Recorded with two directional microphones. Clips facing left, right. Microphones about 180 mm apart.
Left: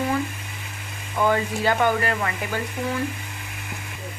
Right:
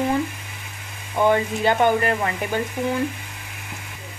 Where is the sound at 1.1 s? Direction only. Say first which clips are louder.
Right 3 dB; 20° right (ahead or behind).